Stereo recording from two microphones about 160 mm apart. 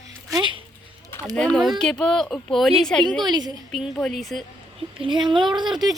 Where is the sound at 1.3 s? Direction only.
5° left (ahead or behind).